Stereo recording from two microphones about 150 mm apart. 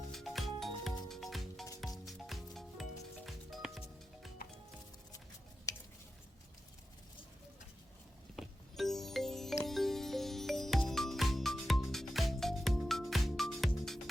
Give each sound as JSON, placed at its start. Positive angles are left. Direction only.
{"t": 0.1, "sound": "music", "side_deg": 0}
{"t": 5.7, "sound": "a sound", "side_deg": 25}
{"t": 8.4, "sound": "music", "side_deg": 0}